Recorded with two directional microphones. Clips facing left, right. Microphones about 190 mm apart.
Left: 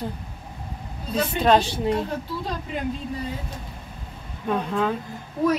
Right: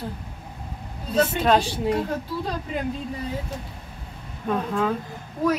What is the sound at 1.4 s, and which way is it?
Speech, 10° right (ahead or behind).